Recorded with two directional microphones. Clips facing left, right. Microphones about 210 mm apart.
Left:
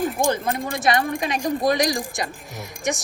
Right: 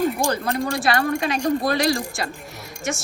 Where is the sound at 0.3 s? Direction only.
15° left (ahead or behind).